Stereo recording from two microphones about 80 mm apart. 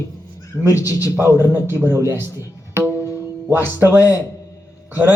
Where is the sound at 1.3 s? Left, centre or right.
Right.